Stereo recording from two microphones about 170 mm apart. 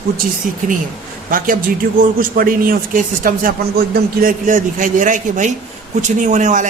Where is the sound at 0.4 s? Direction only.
50° right (ahead or behind).